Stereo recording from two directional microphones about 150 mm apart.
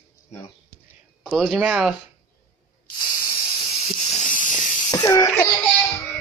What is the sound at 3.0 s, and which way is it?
Spray, 25° left (ahead or behind).